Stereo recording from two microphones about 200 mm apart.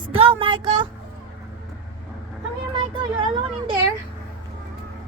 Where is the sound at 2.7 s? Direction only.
25° right (ahead or behind).